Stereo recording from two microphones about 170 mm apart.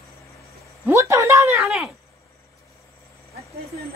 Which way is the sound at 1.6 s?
Centre (ahead or behind).